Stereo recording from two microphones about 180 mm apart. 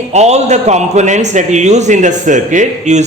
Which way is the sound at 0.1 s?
40° right (ahead or behind).